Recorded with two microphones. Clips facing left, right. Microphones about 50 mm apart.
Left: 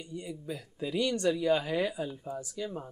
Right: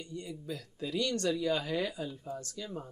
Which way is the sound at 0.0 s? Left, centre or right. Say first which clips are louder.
Left 2 dB; centre.